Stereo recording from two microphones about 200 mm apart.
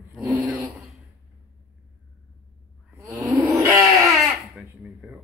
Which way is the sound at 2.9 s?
20° right (ahead or behind).